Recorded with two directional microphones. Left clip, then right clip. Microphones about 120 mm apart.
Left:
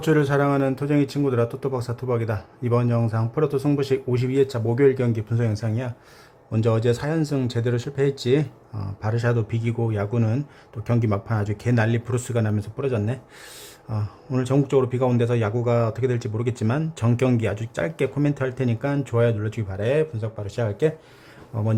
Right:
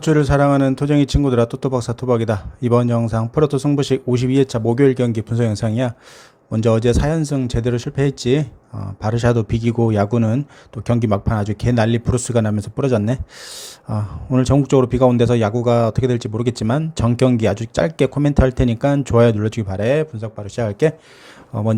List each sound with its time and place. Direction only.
0.0 s speech: 35° right (ahead or behind); by 5.9 s 55° right (ahead or behind)
6.5 s speech: 40° right (ahead or behind)
14.7 s speech: 40° right (ahead or behind)